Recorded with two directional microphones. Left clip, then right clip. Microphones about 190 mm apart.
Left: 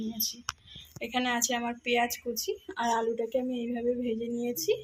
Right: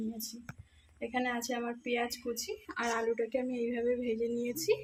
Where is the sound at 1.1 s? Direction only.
25° left (ahead or behind).